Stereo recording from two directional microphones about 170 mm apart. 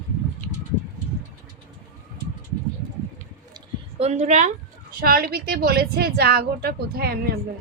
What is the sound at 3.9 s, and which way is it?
Speech, 40° right (ahead or behind).